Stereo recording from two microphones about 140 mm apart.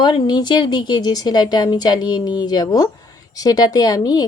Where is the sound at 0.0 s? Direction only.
35° left (ahead or behind).